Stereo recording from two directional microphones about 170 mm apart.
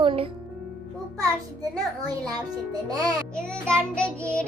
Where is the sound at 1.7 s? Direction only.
20° right (ahead or behind).